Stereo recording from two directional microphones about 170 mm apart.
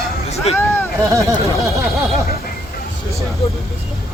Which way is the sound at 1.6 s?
15° right (ahead or behind).